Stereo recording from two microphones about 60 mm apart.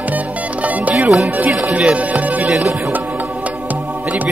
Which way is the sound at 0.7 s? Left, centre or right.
Right.